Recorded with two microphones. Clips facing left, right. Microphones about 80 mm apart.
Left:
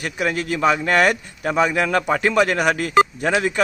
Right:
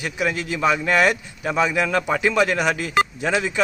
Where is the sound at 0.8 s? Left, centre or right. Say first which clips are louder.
Left 1 dB; left.